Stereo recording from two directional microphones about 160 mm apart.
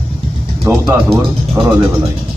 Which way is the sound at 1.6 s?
30° right (ahead or behind).